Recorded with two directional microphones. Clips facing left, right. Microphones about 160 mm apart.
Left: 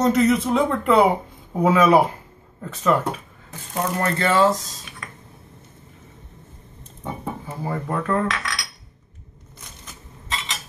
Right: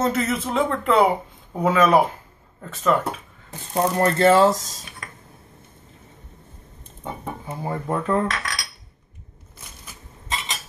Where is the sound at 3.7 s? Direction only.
35° right (ahead or behind).